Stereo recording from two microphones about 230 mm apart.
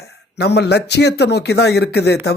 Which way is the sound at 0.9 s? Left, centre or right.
Left.